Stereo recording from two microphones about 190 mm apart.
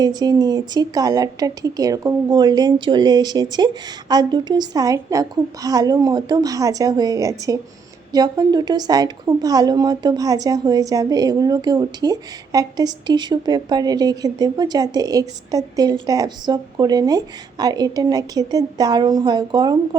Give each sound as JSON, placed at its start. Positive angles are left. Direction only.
{"t": 0.0, "sound": "a woman's voice", "side_deg": -20}